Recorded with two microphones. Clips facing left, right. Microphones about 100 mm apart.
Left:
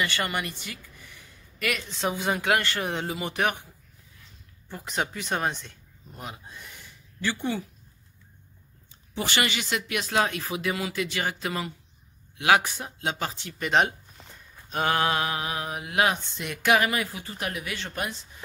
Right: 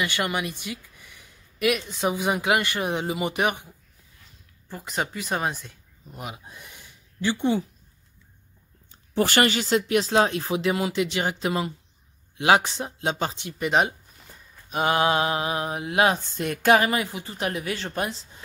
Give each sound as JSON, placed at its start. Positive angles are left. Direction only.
{"t": 0.0, "sound": "speech", "side_deg": -15}
{"t": 4.6, "sound": "speech", "side_deg": 0}
{"t": 9.1, "sound": "speech", "side_deg": -45}
{"t": 13.7, "sound": "a sound", "side_deg": -5}
{"t": 14.8, "sound": "speech", "side_deg": -20}